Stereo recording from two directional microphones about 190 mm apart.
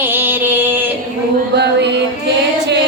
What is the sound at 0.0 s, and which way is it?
Singing, 10° right (ahead or behind).